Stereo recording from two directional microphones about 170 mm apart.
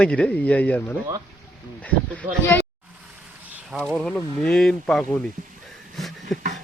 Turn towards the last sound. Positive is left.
turn(degrees=0)  # may be behind; listen again after turning